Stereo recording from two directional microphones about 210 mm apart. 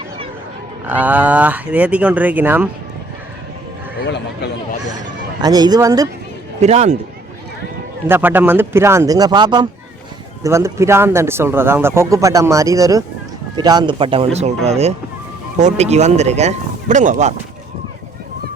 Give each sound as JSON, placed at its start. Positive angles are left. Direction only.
{"t": 0.9, "sound": "speech", "side_deg": -10}
{"t": 5.4, "sound": "speech", "side_deg": -20}
{"t": 6.6, "sound": "speech", "side_deg": -30}
{"t": 8.0, "sound": "speech", "side_deg": -10}